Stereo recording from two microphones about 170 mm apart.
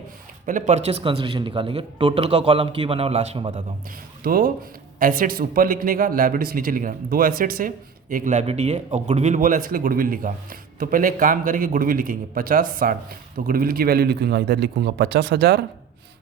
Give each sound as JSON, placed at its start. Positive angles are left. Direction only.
{"t": 0.4, "sound": "speech", "side_deg": -45}
{"t": 4.2, "sound": "a man's voice", "side_deg": -60}